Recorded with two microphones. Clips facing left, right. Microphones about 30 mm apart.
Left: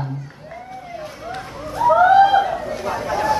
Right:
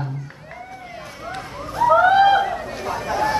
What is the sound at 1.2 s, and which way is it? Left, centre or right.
Police car, centre.